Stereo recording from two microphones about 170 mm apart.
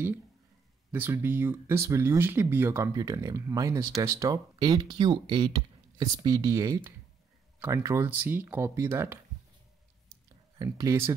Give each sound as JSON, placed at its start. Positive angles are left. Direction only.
{"t": 0.9, "sound": "speech", "side_deg": -15}
{"t": 10.6, "sound": "speech", "side_deg": -20}